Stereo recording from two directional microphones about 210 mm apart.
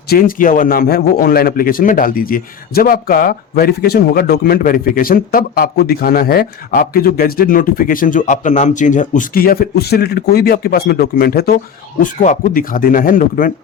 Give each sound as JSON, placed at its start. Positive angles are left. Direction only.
{"t": 0.1, "sound": "a man's voice", "side_deg": 40}